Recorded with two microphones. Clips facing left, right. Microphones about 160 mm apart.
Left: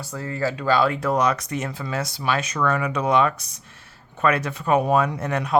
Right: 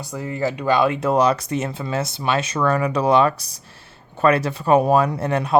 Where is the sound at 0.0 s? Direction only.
15° right (ahead or behind).